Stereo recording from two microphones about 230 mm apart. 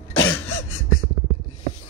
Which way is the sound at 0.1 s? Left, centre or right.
Left.